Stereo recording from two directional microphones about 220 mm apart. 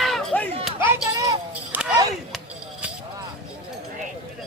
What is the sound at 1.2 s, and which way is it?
Children playing, 10° right (ahead or behind).